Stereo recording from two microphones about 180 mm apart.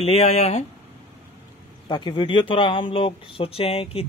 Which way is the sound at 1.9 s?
25° left (ahead or behind).